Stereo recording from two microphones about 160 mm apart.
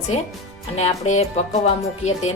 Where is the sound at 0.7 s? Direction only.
45° left (ahead or behind).